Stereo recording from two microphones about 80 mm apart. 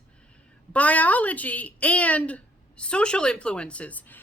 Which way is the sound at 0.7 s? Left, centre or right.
Centre.